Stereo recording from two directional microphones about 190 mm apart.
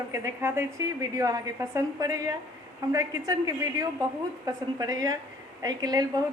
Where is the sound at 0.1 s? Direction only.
15° right (ahead or behind).